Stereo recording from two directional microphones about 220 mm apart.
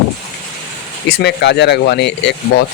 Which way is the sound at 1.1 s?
50° left (ahead or behind).